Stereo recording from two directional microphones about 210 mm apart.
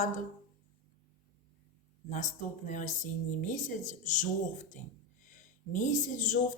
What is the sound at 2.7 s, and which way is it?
Speech, 35° left (ahead or behind).